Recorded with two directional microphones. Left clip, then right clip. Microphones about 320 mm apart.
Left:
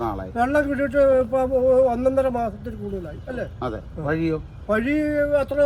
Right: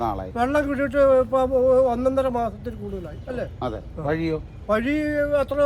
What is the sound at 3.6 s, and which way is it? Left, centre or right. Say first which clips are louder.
Speech: even; right.